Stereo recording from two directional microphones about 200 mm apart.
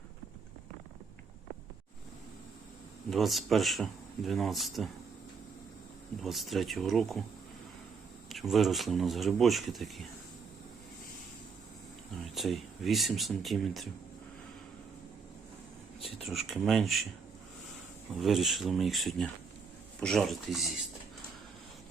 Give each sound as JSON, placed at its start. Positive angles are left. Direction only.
{"t": 3.1, "sound": "speech", "side_deg": 0}
{"t": 6.2, "sound": "speech", "side_deg": 0}
{"t": 8.3, "sound": "speech", "side_deg": 0}
{"t": 12.2, "sound": "speech", "side_deg": 0}
{"t": 16.0, "sound": "a sound", "side_deg": 30}
{"t": 16.2, "sound": "speech", "side_deg": 0}
{"t": 18.1, "sound": "speech", "side_deg": 0}